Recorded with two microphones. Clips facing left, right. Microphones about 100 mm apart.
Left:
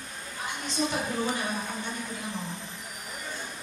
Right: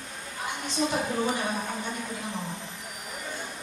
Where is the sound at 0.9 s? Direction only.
25° right (ahead or behind).